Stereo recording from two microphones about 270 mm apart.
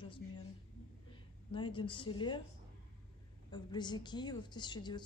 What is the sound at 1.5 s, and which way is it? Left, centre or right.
Speech, centre.